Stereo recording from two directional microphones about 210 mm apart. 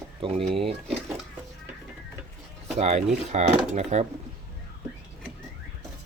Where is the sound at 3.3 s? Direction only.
35° right (ahead or behind).